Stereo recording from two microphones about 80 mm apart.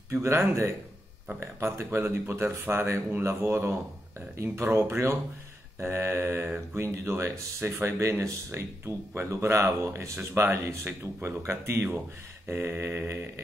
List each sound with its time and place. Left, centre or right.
0.1 s speech: right